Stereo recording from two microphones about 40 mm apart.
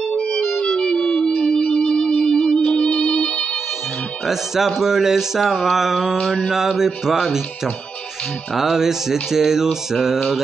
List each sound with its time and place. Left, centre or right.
0.1 s music: left
0.7 s music: centre
4.8 s mantra: centre
6.5 s music: centre
8.5 s music: centre